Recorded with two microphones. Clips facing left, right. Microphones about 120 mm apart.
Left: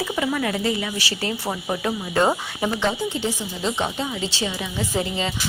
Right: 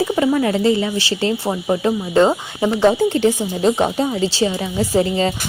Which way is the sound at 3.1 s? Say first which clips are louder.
Right 10 dB; 60° right (ahead or behind).